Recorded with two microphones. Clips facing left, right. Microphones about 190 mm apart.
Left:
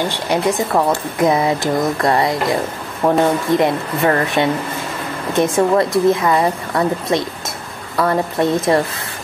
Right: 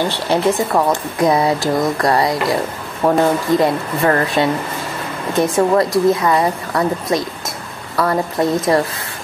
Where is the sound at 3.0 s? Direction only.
5° right (ahead or behind).